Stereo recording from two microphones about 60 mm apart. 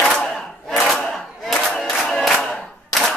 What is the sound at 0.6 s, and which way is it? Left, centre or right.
Battle cry, centre.